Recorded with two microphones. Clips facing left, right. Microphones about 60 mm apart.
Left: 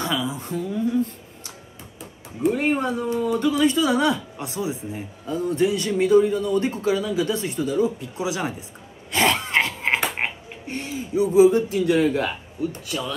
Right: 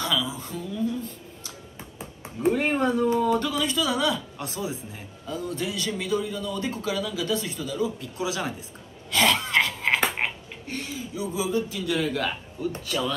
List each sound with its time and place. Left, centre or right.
0.0 s a sound: left
2.5 s speech: centre
9.1 s wheeze: left
12.8 s speech: centre